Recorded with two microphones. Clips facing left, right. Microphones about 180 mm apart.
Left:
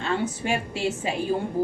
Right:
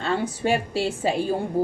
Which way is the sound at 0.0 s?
35° right (ahead or behind).